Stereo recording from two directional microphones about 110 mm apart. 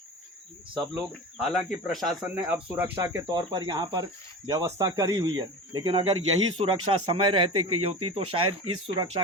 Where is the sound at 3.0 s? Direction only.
25° right (ahead or behind).